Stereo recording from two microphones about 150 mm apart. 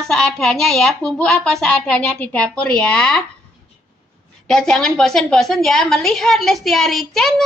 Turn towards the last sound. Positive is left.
turn(degrees=0)  # may be behind; listen again after turning